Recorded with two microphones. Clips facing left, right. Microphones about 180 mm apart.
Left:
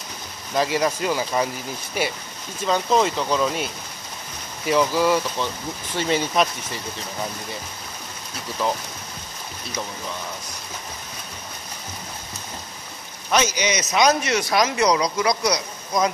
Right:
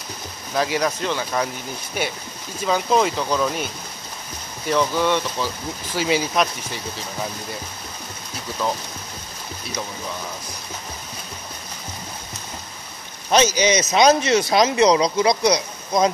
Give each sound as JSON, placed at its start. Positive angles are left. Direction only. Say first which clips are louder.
{"t": 0.6, "sound": "speech", "louder": "even", "side_deg": 0}
{"t": 2.6, "sound": "speech", "louder": "right 1 dB", "side_deg": -5}
{"t": 4.6, "sound": "speech", "louder": "left 1 dB", "side_deg": 5}
{"t": 13.3, "sound": "speech", "louder": "right 4 dB", "side_deg": -30}